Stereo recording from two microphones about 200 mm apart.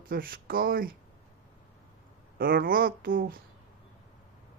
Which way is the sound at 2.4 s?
45° right (ahead or behind).